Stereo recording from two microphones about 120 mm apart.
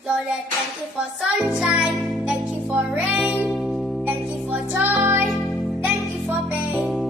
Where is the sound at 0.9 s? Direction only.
10° right (ahead or behind).